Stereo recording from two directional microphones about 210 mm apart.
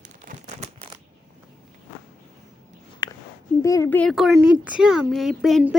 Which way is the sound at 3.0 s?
20° left (ahead or behind).